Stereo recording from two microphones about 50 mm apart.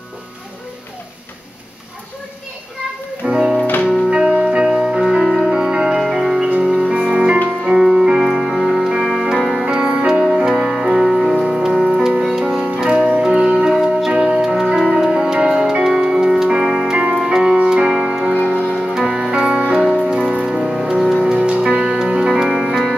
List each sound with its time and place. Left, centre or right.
3.3 s music: centre
7.6 s keyboard: centre
8.2 s music: centre
17.6 s keyboard: centre
18.5 s music: right
18.9 s music: centre
21.2 s music: right